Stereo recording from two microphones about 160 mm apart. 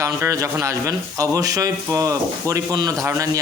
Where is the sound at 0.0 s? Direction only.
20° right (ahead or behind).